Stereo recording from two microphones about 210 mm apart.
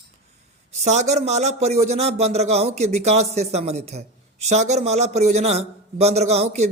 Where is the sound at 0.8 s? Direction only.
35° right (ahead or behind).